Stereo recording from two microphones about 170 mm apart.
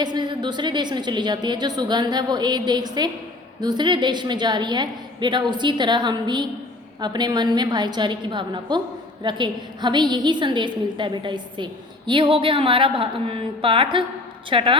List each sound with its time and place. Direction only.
0.0 s a woman's voice: 25° right (ahead or behind)